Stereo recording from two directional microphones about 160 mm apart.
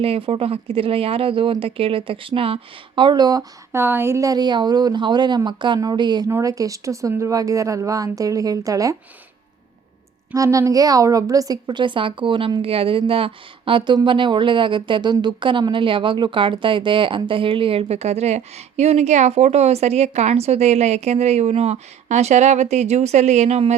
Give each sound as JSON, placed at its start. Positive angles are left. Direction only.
{"t": 0.0, "sound": "speech", "side_deg": -35}
{"t": 10.3, "sound": "a woman's voice", "side_deg": -20}